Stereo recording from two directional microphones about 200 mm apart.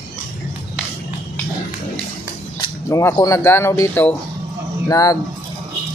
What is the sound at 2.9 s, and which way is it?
Speech, 15° left (ahead or behind).